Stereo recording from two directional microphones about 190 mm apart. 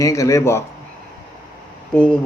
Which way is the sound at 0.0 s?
15° left (ahead or behind).